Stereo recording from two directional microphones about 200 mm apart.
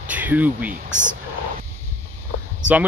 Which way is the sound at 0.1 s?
10° right (ahead or behind).